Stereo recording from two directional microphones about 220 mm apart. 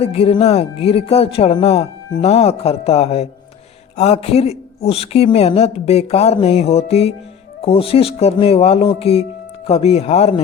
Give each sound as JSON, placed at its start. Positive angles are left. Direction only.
{"t": 0.0, "sound": "speech", "side_deg": 25}